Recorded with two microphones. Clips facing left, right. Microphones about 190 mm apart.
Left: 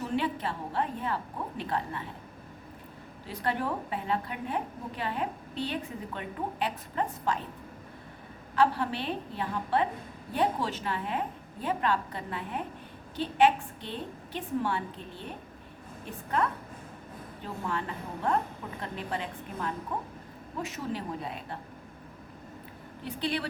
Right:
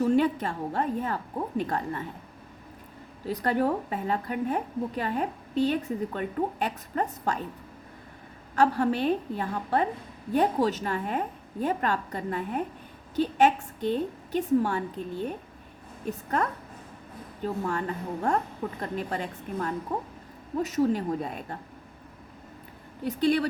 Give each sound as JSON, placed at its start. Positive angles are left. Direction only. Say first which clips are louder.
{"t": 0.0, "sound": "a woman's voice", "louder": "right 8 dB", "side_deg": -45}
{"t": 3.2, "sound": "a woman's voice", "louder": "right 6 dB", "side_deg": -40}
{"t": 8.5, "sound": "a woman's voice", "louder": "right 3 dB", "side_deg": -45}
{"t": 23.0, "sound": "a woman's voice", "louder": "right 8 dB", "side_deg": -45}